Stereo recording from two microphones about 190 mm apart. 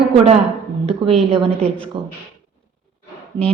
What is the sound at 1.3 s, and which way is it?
Speech, 30° right (ahead or behind).